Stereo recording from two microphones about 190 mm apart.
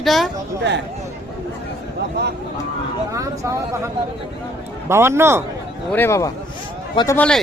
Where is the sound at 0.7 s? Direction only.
65° right (ahead or behind).